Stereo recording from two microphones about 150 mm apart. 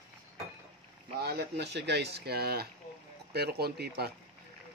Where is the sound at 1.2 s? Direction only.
90° right.